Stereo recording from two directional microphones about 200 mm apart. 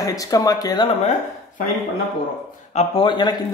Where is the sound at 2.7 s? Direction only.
25° left (ahead or behind).